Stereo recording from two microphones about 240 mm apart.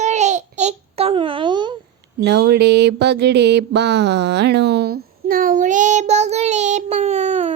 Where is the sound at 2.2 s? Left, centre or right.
Right.